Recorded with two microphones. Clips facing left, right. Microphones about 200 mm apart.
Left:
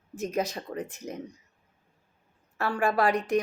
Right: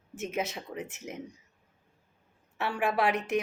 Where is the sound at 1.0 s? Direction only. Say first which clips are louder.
Left 3 dB; 35° left (ahead or behind).